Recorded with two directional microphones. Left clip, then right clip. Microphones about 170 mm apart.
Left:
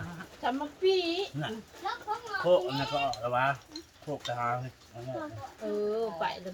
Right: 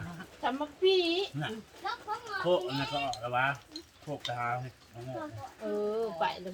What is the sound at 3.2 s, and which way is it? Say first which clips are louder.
Speech: left 2 dB; 10° left (ahead or behind).